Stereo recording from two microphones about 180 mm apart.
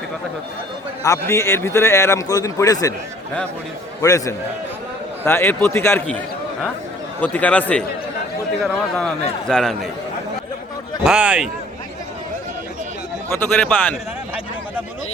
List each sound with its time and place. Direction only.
1.0 s a man's voice: 15° left (ahead or behind)
4.0 s a man's voice: 15° left (ahead or behind)
7.2 s a man's voice: 10° left (ahead or behind)
11.0 s a man's voice: 5° right (ahead or behind)
13.3 s a man's voice: 5° left (ahead or behind)